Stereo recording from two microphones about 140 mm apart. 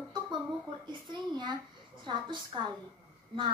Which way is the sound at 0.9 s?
35° right (ahead or behind).